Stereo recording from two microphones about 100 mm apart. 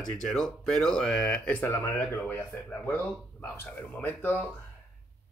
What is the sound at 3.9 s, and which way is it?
Speech, 15° left (ahead or behind).